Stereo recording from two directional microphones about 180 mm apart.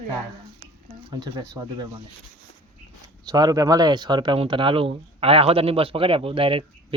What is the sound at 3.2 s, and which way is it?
Speech, 20° right (ahead or behind).